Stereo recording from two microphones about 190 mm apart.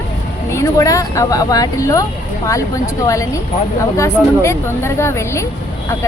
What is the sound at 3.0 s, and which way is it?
Speech, 15° left (ahead or behind).